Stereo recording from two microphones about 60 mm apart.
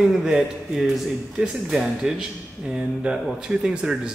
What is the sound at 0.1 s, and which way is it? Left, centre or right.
Speech, centre.